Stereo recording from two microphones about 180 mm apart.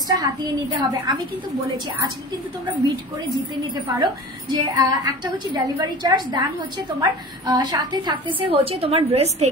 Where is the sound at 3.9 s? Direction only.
20° right (ahead or behind).